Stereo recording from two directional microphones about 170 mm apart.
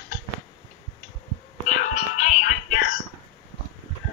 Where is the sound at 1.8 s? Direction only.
45° left (ahead or behind).